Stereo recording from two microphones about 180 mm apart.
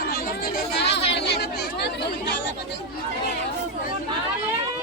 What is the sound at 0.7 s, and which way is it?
Chatter, 65° left (ahead or behind).